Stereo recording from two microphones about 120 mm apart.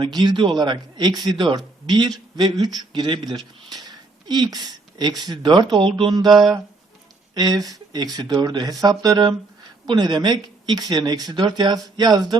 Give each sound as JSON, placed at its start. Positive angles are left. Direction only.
{"t": 0.0, "sound": "speech", "side_deg": -35}